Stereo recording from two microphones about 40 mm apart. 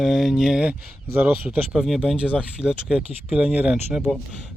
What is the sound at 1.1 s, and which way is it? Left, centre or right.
Speech, right.